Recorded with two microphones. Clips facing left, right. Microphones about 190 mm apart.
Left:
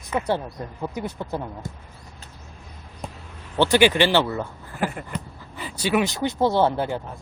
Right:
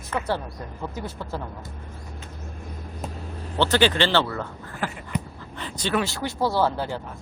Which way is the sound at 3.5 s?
15° left (ahead or behind).